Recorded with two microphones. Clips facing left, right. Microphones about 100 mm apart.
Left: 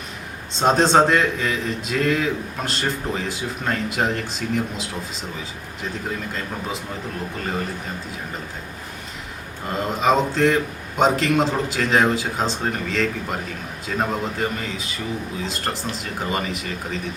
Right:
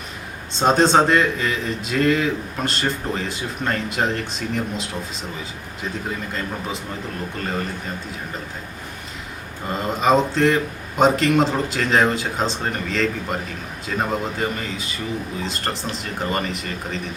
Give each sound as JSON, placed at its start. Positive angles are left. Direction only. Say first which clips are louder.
{"t": 0.5, "sound": "a man's voice", "louder": "even", "side_deg": 0}
{"t": 9.6, "sound": "a man's voice", "louder": "right 1 dB", "side_deg": 0}